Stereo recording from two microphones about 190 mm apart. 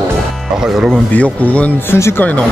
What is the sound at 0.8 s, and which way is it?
Speech, 5° left (ahead or behind).